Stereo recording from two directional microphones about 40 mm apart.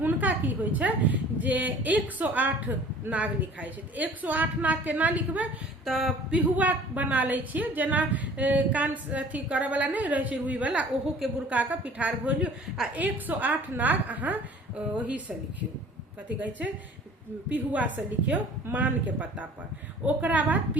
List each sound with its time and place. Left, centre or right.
0.0 s a woman's voice: right
5.8 s a sound: centre
6.6 s a woman's voice: right
13.0 s a woman's voice: right
14.8 s a woman's voice: right
16.4 s a woman's voice: right